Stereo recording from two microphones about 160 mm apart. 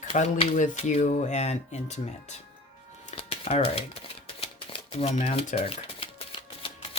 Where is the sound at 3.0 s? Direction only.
40° left (ahead or behind).